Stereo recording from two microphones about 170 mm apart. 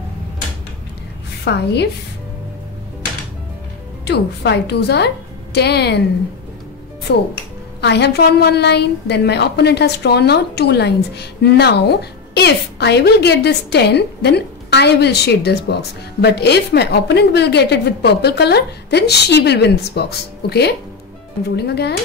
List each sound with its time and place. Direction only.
1.4 s a woman's voice: 75° left (ahead or behind)
4.0 s a woman's voice: 80° left
7.1 s a woman's voice: 70° left (ahead or behind)